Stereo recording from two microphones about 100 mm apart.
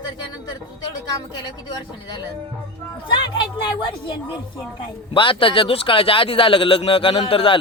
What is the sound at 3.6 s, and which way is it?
A woman's voice, 55° left (ahead or behind).